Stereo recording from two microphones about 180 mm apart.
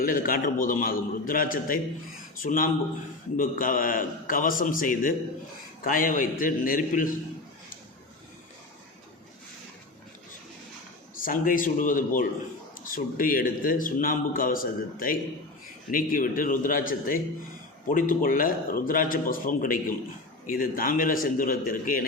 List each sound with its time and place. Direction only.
0.0 s a man's voice: 50° left (ahead or behind)
11.1 s a man's voice: 50° left (ahead or behind)